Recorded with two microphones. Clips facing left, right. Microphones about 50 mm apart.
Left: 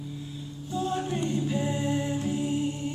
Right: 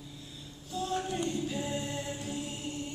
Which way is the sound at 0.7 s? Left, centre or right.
Centre.